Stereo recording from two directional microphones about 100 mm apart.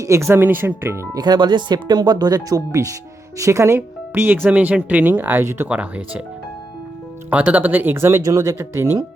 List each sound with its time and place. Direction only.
0.0 s speech: 30° right (ahead or behind)
1.1 s speech: 45° right (ahead or behind); by 6.2 s 15° right (ahead or behind)
7.3 s speech: 15° right (ahead or behind)